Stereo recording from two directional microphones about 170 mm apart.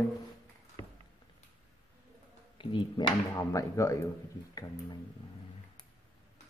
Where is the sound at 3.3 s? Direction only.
20° left (ahead or behind).